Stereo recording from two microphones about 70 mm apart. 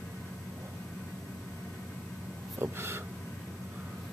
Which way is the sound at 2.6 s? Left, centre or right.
Right.